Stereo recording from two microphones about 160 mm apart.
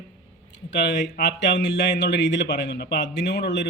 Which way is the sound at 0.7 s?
90° left.